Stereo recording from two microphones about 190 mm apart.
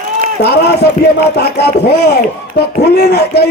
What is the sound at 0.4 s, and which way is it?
Speech, 60° left (ahead or behind).